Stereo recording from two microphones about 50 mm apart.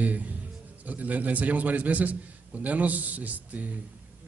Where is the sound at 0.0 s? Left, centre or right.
Right.